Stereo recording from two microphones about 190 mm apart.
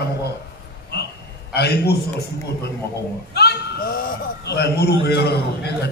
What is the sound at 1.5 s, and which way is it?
Speech, 55° left (ahead or behind).